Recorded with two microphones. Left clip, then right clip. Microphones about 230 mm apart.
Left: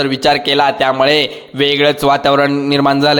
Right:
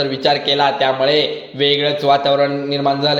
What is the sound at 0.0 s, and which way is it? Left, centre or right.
A man's voice, left.